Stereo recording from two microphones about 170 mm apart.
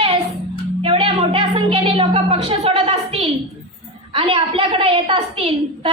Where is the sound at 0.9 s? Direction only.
35° right (ahead or behind).